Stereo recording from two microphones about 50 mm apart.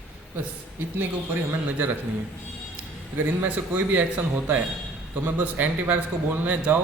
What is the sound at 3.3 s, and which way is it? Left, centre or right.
A man's voice, right.